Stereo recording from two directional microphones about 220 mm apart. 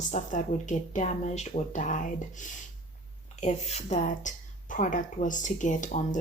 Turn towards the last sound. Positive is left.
turn(degrees=35)  # may be behind; listen again after turning